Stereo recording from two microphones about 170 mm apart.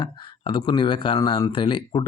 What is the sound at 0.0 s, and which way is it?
Speech, 30° left (ahead or behind).